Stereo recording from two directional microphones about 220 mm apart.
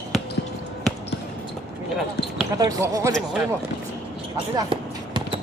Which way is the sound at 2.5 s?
15° right (ahead or behind).